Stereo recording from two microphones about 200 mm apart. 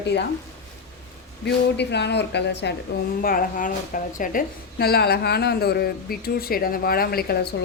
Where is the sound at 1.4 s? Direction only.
60° left (ahead or behind).